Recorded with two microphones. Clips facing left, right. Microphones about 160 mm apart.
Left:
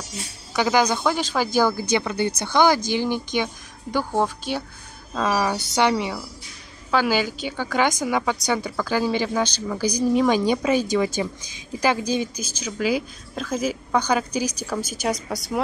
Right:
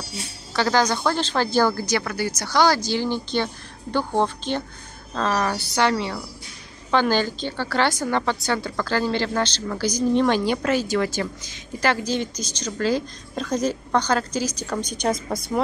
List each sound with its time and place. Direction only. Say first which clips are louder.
0.5 s a woman's voice: left 1 dB; 15° left (ahead or behind)